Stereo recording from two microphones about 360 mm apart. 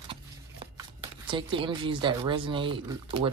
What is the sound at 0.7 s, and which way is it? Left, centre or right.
Speech, centre.